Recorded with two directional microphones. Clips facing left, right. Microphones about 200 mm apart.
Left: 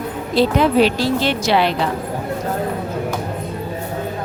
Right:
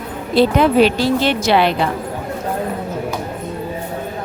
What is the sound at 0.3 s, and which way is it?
Speech, 60° right (ahead or behind).